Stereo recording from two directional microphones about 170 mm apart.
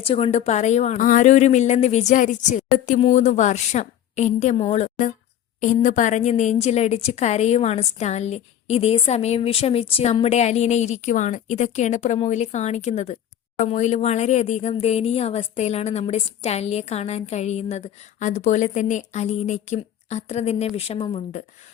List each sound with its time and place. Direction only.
0.0 s a woman's voice: 35° left (ahead or behind)